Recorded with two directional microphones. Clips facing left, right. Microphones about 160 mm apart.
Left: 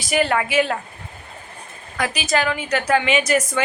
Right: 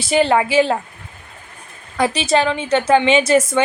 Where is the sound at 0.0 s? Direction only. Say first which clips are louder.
Right 5 dB; 30° right (ahead or behind).